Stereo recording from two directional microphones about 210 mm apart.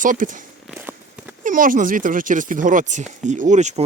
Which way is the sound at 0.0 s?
40° right (ahead or behind).